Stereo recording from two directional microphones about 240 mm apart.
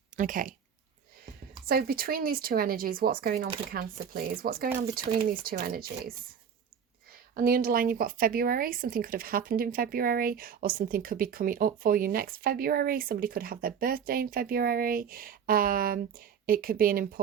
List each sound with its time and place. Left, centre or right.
0.2 s a woman's voice: right
7.1 s a woman's voice: right